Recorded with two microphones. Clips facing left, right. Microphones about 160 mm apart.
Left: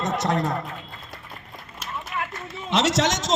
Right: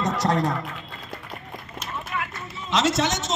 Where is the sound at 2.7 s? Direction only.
70° left (ahead or behind); by 3.3 s 90° left.